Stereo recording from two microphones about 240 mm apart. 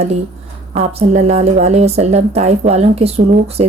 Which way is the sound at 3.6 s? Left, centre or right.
Right.